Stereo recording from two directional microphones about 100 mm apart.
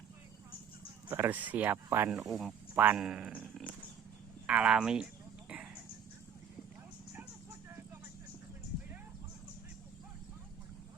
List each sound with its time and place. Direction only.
1.0 s speech: 20° right (ahead or behind)
2.0 s speech: centre (ahead or behind)
2.7 s speech: 20° right (ahead or behind)
3.0 s speech: 5° right (ahead or behind)